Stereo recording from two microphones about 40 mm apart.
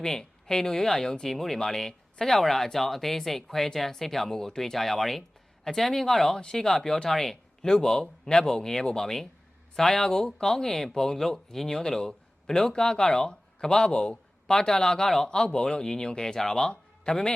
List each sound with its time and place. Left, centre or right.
0.0 s speech: centre
15.3 s speech: left